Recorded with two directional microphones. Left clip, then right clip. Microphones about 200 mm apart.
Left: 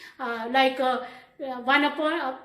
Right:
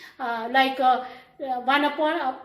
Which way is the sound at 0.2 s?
40° left (ahead or behind).